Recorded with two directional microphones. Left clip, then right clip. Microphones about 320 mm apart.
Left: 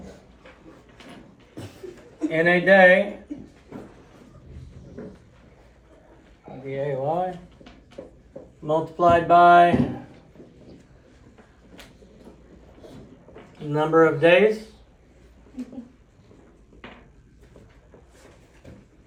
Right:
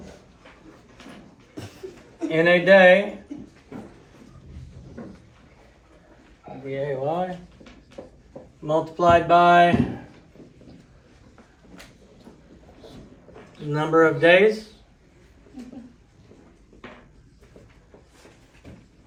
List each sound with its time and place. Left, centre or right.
2.3 s speech: centre
6.7 s a sound: centre
8.6 s speech: centre
13.7 s speech: centre